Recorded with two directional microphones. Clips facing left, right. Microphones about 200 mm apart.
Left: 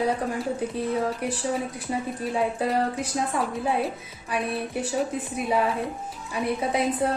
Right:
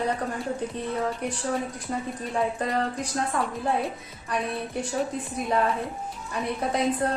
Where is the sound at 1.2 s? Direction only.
5° left (ahead or behind).